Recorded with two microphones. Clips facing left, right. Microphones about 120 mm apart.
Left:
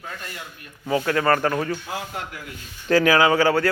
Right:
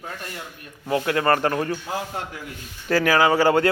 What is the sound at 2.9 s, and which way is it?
Speech, 5° right (ahead or behind).